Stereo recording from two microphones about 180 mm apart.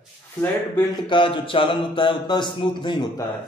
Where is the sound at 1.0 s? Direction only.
25° left (ahead or behind).